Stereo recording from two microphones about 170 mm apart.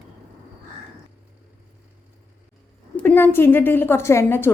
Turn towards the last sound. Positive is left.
turn(degrees=15)  # may be behind; listen again after turning